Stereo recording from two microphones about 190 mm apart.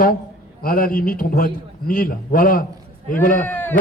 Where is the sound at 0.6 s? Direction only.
50° left (ahead or behind).